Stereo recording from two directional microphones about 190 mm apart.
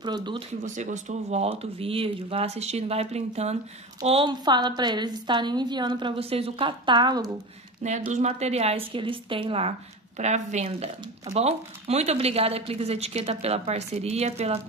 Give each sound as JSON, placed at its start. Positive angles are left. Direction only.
{"t": 0.0, "sound": "a woman's voice", "side_deg": -25}
{"t": 0.7, "sound": "a woman's voice", "side_deg": -40}
{"t": 8.1, "sound": "speech", "side_deg": -35}